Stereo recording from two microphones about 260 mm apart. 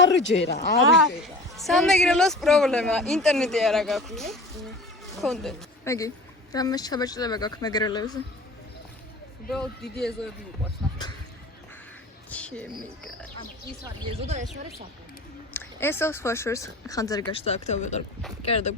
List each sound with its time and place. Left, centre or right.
0.2 s speech: left
1.5 s speech: centre
9.5 s speech: centre
12.3 s speech: centre
13.8 s speech: right
15.5 s speech: centre
17.3 s speech: left